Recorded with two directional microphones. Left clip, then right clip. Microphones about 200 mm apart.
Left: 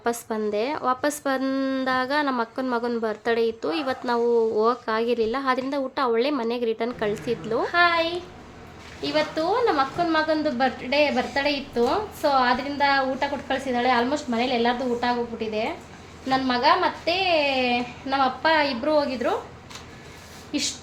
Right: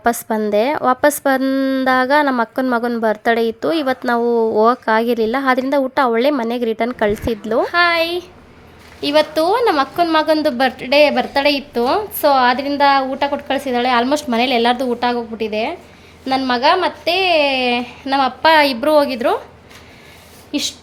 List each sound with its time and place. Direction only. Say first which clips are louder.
0.0 s a woman's voice: right 9 dB; 35° right (ahead or behind)
9.0 s a woman's voice: right 10 dB; 60° right (ahead or behind)